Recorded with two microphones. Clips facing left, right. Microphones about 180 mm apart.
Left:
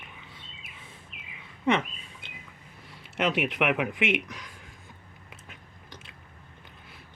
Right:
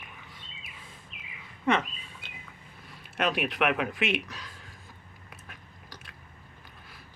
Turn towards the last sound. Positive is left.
turn(degrees=20)  # may be behind; listen again after turning